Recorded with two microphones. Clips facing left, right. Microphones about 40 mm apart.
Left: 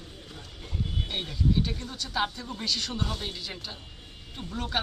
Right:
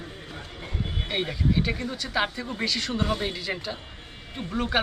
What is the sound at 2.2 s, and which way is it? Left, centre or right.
Speech, right.